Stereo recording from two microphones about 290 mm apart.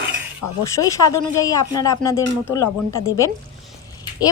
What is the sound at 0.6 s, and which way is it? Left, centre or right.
Speech, centre.